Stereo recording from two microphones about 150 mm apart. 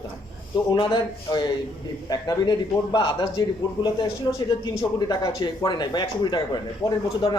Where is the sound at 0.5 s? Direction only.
30° left (ahead or behind).